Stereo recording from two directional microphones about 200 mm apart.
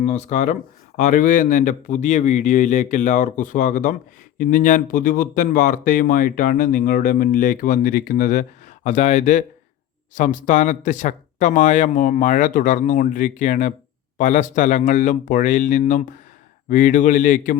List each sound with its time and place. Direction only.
0.0 s speech: 35° left (ahead or behind)